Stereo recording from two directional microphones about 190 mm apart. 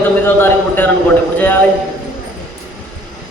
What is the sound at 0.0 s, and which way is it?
Speech, 10° left (ahead or behind).